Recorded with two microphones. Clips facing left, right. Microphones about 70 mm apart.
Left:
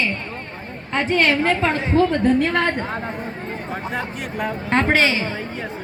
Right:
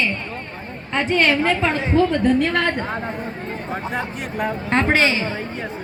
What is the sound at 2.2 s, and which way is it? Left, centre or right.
Speech, left.